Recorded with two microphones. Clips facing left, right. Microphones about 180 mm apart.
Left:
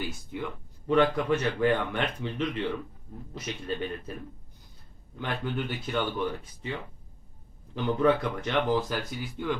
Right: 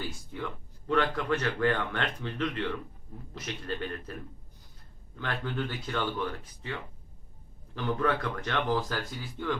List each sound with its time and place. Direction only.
0.0 s a sound: 10° left (ahead or behind)
0.9 s speech: 15° left (ahead or behind)
5.1 s speech: 15° left (ahead or behind)
7.8 s speech: 20° left (ahead or behind)